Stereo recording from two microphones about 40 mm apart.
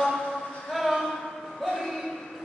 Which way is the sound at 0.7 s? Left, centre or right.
Centre.